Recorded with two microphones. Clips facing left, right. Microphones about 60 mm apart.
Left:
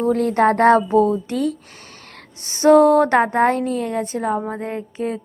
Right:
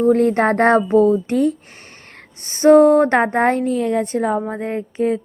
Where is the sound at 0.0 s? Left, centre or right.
Right.